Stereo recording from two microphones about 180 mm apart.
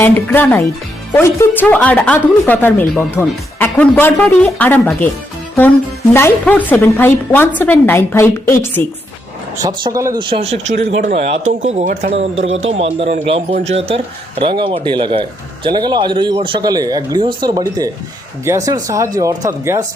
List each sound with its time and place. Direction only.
0.0 s speech: 10° left (ahead or behind)
6.1 s speech: 10° left (ahead or behind)
9.6 s speech: 20° right (ahead or behind)